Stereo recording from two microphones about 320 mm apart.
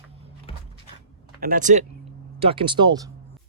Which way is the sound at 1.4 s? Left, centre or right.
Right.